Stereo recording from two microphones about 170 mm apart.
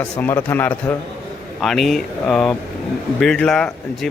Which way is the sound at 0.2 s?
15° left (ahead or behind).